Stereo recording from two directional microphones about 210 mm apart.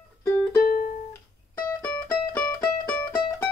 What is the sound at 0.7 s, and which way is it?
Music, 40° left (ahead or behind).